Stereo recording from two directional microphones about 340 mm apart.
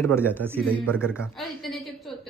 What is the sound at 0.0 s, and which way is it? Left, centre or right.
Speech, centre.